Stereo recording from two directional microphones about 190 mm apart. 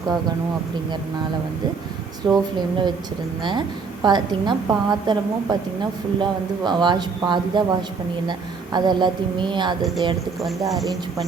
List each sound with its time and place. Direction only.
2.3 s a woman's voice: 20° right (ahead or behind)
4.0 s a woman's voice: 20° right (ahead or behind)
10.7 s speech: centre (ahead or behind)